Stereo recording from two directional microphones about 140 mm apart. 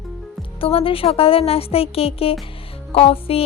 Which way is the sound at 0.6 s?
40° left (ahead or behind).